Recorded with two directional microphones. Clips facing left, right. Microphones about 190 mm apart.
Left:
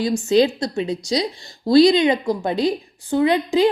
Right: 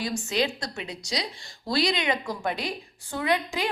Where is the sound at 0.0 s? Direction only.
30° left (ahead or behind).